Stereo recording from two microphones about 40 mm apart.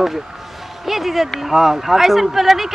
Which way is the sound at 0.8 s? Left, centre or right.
Centre.